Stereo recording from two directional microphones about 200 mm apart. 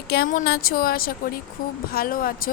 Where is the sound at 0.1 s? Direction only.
45° left (ahead or behind).